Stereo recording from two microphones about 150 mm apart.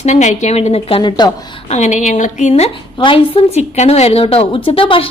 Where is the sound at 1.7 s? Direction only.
50° left (ahead or behind).